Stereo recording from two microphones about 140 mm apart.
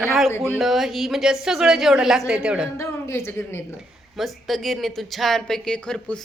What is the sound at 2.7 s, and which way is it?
Speech, 20° left (ahead or behind).